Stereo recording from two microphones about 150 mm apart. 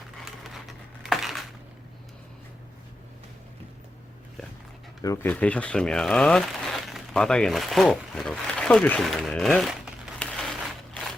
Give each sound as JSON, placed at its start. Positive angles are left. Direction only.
{"t": 1.0, "sound": "a sound", "side_deg": 0}
{"t": 5.0, "sound": "speech", "side_deg": 15}
{"t": 10.2, "sound": "crushing", "side_deg": 5}